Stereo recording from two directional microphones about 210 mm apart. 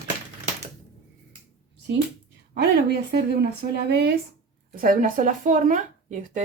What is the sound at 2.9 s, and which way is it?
Speech, 50° right (ahead or behind).